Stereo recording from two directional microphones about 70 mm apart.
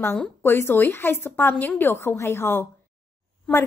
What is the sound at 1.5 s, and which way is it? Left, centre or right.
Speech, centre.